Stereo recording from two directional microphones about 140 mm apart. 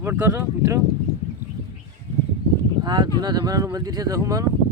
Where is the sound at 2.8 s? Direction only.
30° right (ahead or behind).